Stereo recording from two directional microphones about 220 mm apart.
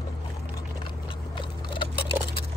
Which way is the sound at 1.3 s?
20° left (ahead or behind).